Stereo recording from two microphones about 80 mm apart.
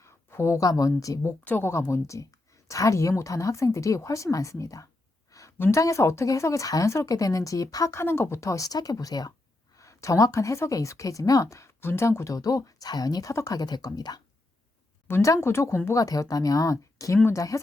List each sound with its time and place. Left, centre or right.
0.0 s speech: left
1.5 s speech: left
1.9 s speech: left
5.3 s a sound: left
5.7 s speech: left
7.9 s speech: left
9.7 s speech: left
13.6 s speech: left
15.0 s speech: left